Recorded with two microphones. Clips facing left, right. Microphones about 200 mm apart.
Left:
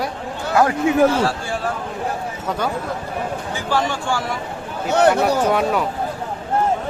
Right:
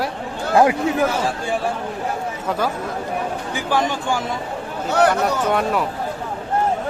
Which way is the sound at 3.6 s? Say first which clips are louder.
Right 1 dB; 15° right (ahead or behind).